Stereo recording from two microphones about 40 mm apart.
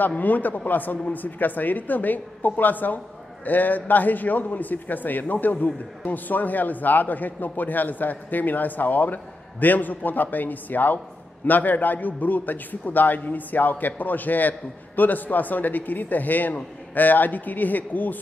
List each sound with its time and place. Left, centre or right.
0.2 s a man's voice: left